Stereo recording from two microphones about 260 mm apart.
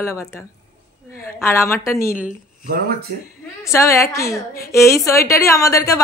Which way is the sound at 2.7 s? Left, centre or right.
Right.